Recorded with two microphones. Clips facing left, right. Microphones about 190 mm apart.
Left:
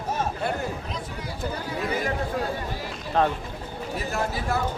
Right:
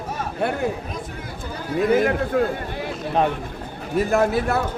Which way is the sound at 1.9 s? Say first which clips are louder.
Right 9 dB; 55° right (ahead or behind).